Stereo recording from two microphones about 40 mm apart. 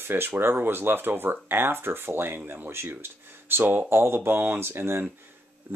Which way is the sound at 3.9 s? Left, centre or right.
Right.